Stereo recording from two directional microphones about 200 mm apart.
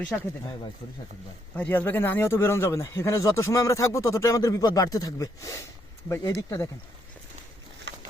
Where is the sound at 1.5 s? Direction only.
10° left (ahead or behind).